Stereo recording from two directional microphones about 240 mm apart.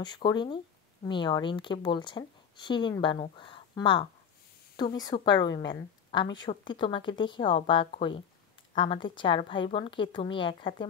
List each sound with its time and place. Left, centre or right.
0.0 s a woman's voice: centre